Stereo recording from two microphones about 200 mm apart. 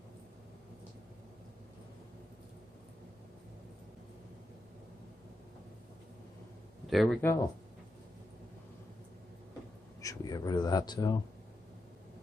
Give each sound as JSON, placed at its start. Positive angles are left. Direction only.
{"t": 6.9, "sound": "speech", "side_deg": 0}
{"t": 7.2, "sound": "speech", "side_deg": 15}
{"t": 10.0, "sound": "speech", "side_deg": 20}